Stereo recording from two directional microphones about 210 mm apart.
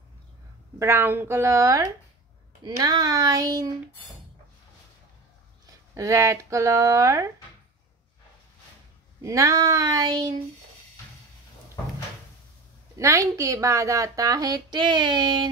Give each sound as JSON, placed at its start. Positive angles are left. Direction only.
{"t": 0.7, "sound": "a woman's voice", "side_deg": -10}
{"t": 5.9, "sound": "a woman's voice", "side_deg": -15}
{"t": 9.2, "sound": "a woman's voice", "side_deg": -15}
{"t": 12.9, "sound": "a woman's voice", "side_deg": -15}